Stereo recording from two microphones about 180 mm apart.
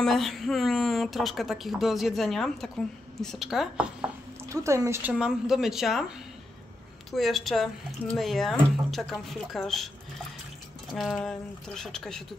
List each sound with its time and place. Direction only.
0.0 s speech: centre (ahead or behind)
4.5 s speech: 15° right (ahead or behind)
5.1 s speech: centre (ahead or behind)
10.9 s speech: centre (ahead or behind)